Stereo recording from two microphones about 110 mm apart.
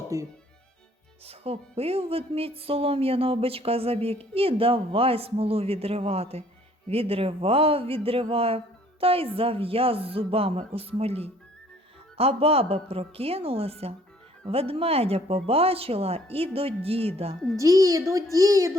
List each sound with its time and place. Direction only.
0.1 s speech: 30° right (ahead or behind)
1.2 s speech: 65° right (ahead or behind)
17.6 s a woman's voice: 30° right (ahead or behind)